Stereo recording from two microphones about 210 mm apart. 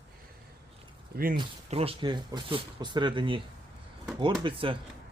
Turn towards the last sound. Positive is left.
turn(degrees=-25)  # may be behind; listen again after turning